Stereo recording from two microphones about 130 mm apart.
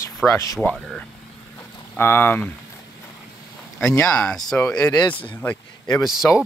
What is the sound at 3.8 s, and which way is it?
Speech, 20° left (ahead or behind).